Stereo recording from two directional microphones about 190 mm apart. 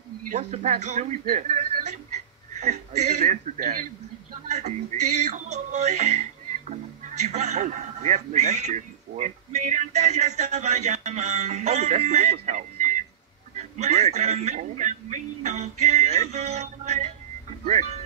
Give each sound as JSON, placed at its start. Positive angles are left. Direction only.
{"t": 0.3, "sound": "a man's voice", "side_deg": -35}
{"t": 4.3, "sound": "a sound", "side_deg": -40}
{"t": 5.3, "sound": "a man's voice", "side_deg": -40}
{"t": 7.2, "sound": "a man's voice", "side_deg": -35}